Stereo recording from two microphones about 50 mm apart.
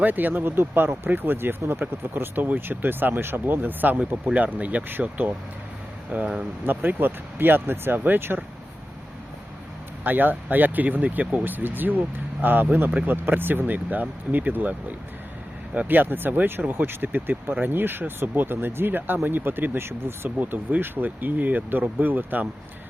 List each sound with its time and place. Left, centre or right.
0.0 s speech: right
4.9 s speech: right
6.1 s speech: right
6.7 s speech: right
10.0 s speech: right
12.9 s speech: right
13.2 s speech: right
20.4 s speech: right